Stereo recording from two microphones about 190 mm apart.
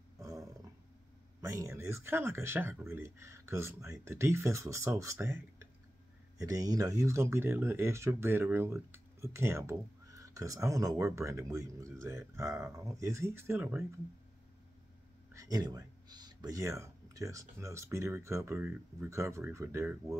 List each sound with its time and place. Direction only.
0.2 s a sound: 15° right (ahead or behind)
1.4 s speech: 15° right (ahead or behind)
15.3 s speech: 20° right (ahead or behind)